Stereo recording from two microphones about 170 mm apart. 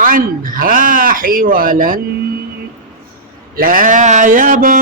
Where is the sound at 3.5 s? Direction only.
55° right (ahead or behind).